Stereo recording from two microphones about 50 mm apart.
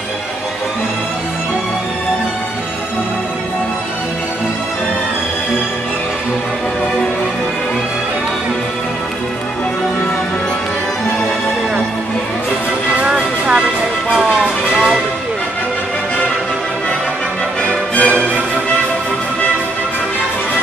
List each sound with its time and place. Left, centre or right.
13.0 s music: centre
17.6 s music: left